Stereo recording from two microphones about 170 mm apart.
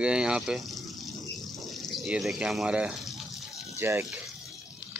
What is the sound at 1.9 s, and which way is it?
A man's voice, centre (ahead or behind).